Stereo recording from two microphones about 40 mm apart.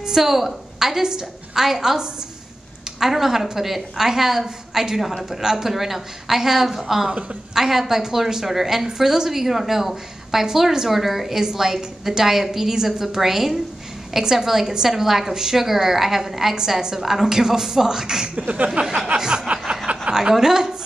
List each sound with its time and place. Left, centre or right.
0.0 s a woman's voice: centre
19.1 s a sound: centre
20.1 s a woman's voice: centre